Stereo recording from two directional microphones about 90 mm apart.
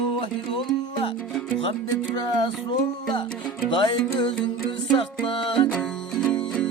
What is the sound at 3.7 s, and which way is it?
Music, 70° left (ahead or behind).